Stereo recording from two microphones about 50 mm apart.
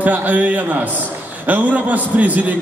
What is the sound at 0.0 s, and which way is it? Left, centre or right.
A man's voice, right.